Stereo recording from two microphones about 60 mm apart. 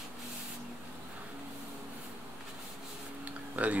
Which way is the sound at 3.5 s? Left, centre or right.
Right.